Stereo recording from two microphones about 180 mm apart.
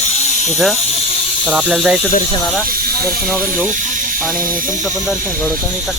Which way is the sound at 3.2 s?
Centre (ahead or behind).